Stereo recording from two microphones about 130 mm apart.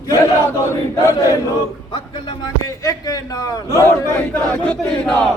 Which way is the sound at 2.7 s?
25° left (ahead or behind).